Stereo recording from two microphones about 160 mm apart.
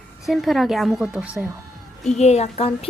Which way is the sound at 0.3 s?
Centre (ahead or behind).